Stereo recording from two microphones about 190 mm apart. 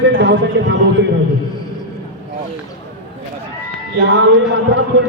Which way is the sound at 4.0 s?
75° right (ahead or behind).